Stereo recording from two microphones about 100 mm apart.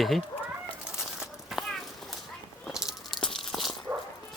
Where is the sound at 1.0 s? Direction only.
5° right (ahead or behind).